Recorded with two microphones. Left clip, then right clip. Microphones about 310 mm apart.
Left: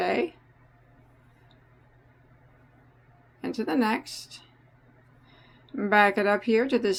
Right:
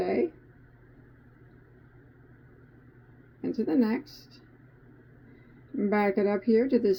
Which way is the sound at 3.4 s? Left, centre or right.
Centre.